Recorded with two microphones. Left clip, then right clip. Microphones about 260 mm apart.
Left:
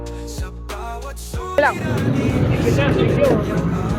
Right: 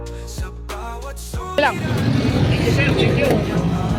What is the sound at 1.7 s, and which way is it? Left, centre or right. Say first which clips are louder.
Vehicle: left 1 dB; centre.